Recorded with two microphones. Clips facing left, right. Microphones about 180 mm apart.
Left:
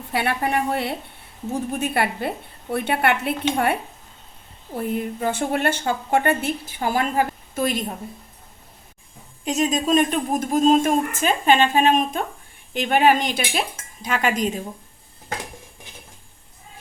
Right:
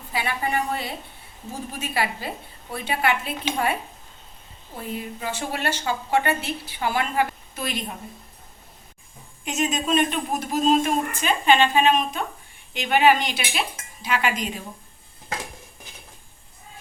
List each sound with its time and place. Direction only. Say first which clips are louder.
0.1 s a woman's voice: left 4 dB; 65° left (ahead or behind)
4.8 s speech: left 7 dB; 55° left (ahead or behind)
9.4 s speech: left 4 dB; 35° left (ahead or behind)